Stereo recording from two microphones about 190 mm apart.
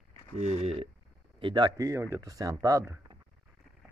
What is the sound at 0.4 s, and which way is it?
Speech, 35° right (ahead or behind).